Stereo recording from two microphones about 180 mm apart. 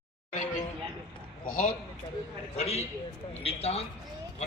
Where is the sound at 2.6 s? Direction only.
35° left (ahead or behind).